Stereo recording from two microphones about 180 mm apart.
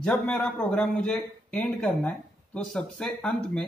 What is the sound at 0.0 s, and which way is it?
A man's voice, 5° left (ahead or behind).